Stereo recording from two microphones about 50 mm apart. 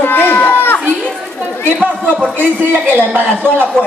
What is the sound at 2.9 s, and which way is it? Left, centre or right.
Speech, right.